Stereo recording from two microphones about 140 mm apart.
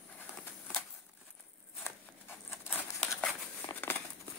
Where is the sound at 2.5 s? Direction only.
15° left (ahead or behind).